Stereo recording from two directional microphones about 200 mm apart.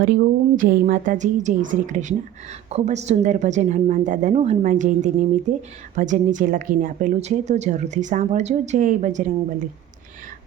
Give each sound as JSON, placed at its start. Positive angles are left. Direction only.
{"t": 0.0, "sound": "a woman's voice", "side_deg": -45}